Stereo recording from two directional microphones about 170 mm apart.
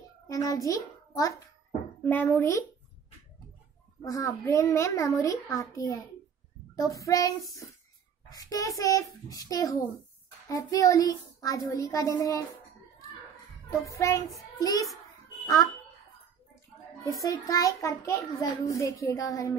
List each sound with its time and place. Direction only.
0.3 s a child's voice: 20° left (ahead or behind)
4.0 s a child's voice: 20° left (ahead or behind)
13.7 s a child's voice: 20° left (ahead or behind)
17.0 s a child's voice: 20° left (ahead or behind)